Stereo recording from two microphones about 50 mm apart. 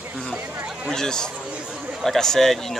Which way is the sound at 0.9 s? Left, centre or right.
Centre.